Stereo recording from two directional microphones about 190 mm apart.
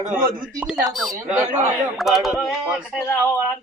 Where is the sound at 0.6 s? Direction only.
5° right (ahead or behind).